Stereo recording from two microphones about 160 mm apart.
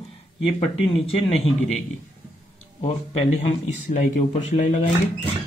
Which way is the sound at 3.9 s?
60° left (ahead or behind).